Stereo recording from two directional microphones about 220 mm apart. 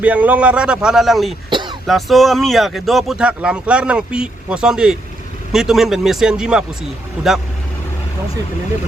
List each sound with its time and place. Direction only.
0.0 s speech: 5° right (ahead or behind)
1.5 s throat clearing: 20° right (ahead or behind)
1.9 s speech: centre (ahead or behind)